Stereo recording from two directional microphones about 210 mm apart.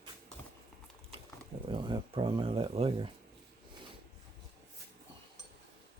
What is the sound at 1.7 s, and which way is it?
Speech, 25° right (ahead or behind).